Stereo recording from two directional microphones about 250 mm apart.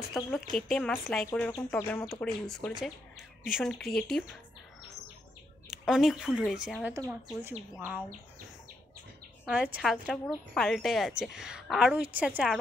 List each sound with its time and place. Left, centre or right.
0.6 s speech: centre
5.7 s speech: centre
9.5 s speech: centre